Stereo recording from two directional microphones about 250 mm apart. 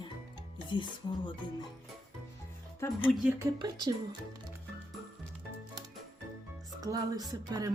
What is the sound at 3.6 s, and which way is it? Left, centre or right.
Speech, centre.